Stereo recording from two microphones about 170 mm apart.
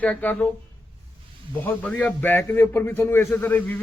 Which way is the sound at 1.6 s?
10° left (ahead or behind).